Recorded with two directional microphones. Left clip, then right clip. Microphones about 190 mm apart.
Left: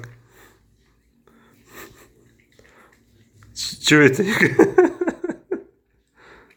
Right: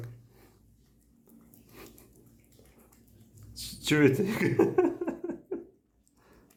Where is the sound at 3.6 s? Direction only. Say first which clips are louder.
Left 11 dB; 20° left (ahead or behind).